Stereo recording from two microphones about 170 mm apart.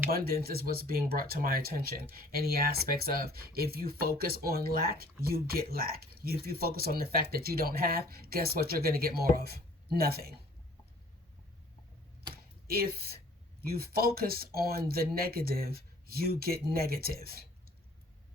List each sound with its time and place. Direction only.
0.1 s speech: 65° right (ahead or behind)
12.3 s a sound: 65° right (ahead or behind)
13.6 s speech: 60° right (ahead or behind)